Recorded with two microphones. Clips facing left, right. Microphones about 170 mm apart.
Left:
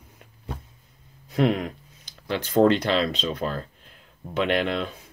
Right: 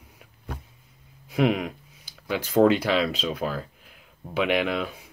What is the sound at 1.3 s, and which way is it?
Speech, 10° right (ahead or behind).